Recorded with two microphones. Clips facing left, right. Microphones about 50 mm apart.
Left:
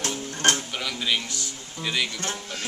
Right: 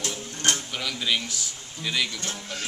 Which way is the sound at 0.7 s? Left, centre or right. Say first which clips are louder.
Even; centre.